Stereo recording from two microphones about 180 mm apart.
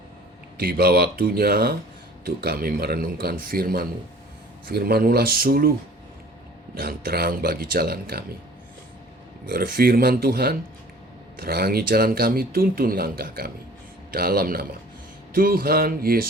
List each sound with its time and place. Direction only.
0.5 s speech: 55° right (ahead or behind)
6.7 s speech: 55° right (ahead or behind)
9.5 s speech: 55° right (ahead or behind)